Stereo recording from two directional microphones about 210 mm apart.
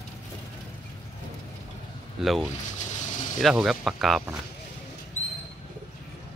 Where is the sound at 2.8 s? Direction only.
35° left (ahead or behind).